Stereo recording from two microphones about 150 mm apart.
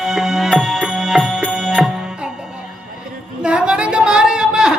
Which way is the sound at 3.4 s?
5° right (ahead or behind).